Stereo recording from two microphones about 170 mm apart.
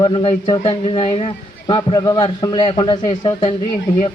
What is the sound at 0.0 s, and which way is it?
A man's voice, 30° left (ahead or behind).